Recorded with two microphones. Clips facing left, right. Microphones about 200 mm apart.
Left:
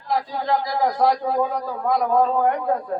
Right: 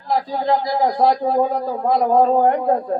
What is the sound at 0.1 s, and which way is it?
A man's voice, 30° right (ahead or behind).